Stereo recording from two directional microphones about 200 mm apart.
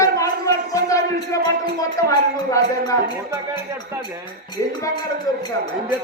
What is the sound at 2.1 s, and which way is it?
Speech, 15° left (ahead or behind).